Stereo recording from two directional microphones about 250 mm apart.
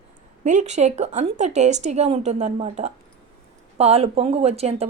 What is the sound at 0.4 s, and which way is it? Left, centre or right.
Speech, right.